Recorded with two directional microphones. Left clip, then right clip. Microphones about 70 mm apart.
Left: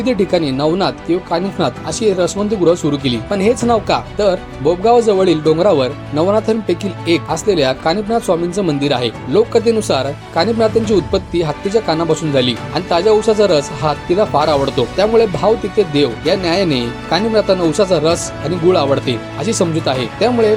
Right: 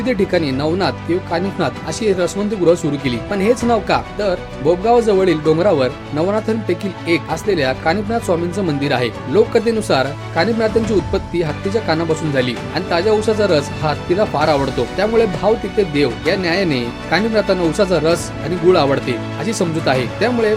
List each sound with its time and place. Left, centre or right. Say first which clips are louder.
0.0 s speech: left 2 dB; left
3.0 s speech: left 3 dB; left